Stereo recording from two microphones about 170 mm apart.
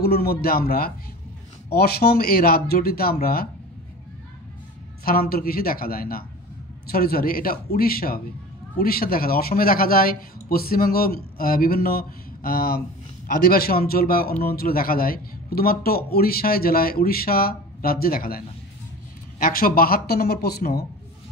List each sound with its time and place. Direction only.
0.0 s a man's voice: 65° left (ahead or behind)
5.0 s a man's voice: 60° left (ahead or behind)